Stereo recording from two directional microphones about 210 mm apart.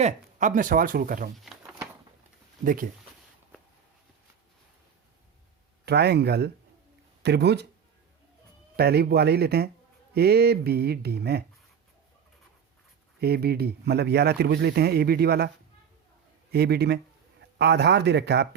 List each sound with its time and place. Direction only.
0.0 s speech: 35° right (ahead or behind)
2.6 s speech: 40° right (ahead or behind)
5.8 s a man's voice: 50° right (ahead or behind)
8.7 s a man's voice: 50° right (ahead or behind)
13.1 s a man's voice: 50° right (ahead or behind)
16.5 s a man's voice: 50° right (ahead or behind)